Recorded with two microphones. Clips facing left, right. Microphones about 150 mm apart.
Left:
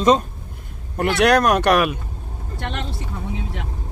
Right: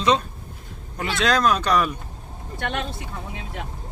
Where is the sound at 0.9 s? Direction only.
60° left (ahead or behind); by 2.0 s 80° left.